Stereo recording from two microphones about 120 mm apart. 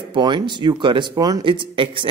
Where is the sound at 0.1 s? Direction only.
40° right (ahead or behind).